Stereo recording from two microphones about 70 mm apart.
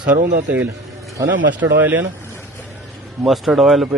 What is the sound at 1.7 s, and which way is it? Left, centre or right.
Speech, right.